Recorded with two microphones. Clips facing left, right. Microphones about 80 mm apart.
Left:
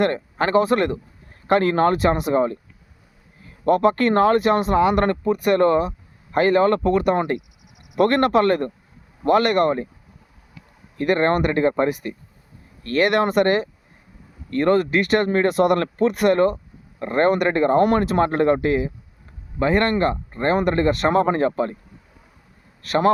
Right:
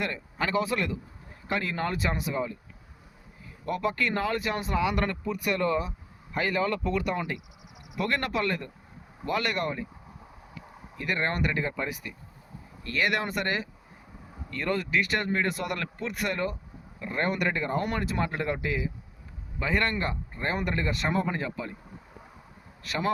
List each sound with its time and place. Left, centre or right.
0.0 s speech: left
1.5 s speech: left
3.7 s speech: left
10.9 s speech: left
22.8 s a man's voice: left